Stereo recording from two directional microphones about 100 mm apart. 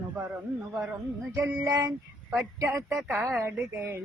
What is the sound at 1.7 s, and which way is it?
Female singing, 35° right (ahead or behind).